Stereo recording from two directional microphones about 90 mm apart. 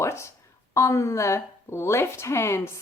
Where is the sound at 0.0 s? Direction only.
30° left (ahead or behind).